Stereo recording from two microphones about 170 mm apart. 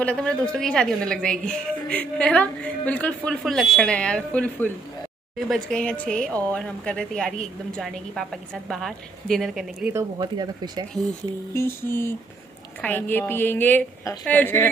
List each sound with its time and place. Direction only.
0.0 s a woman's voice: 5° left (ahead or behind)
9.9 s speech: 25° right (ahead or behind)
11.5 s a woman's voice: 15° left (ahead or behind)